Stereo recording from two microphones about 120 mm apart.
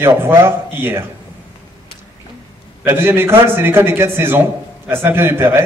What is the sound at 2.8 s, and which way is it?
A man's voice, 20° right (ahead or behind).